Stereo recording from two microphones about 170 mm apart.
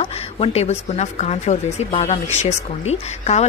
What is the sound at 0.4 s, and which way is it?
Speech, 40° left (ahead or behind).